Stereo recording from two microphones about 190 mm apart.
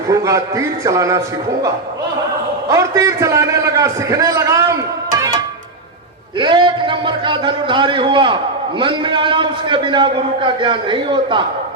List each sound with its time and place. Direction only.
0.1 s a man's voice: 15° right (ahead or behind)
2.6 s a man's voice: 15° right (ahead or behind)
6.4 s a man's voice: 25° right (ahead or behind)